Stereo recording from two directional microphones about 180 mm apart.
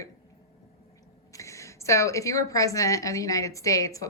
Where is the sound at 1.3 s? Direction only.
15° left (ahead or behind).